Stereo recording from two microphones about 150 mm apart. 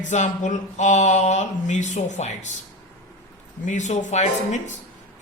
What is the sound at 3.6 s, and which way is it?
Speech, 55° left (ahead or behind).